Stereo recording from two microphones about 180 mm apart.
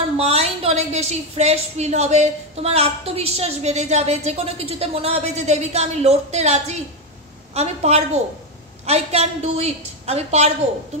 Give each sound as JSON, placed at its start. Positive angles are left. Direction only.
{"t": 0.2, "sound": "a woman's voice", "side_deg": -35}